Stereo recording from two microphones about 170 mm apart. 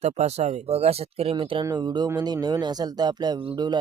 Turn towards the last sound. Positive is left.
turn(degrees=-25)  # may be behind; listen again after turning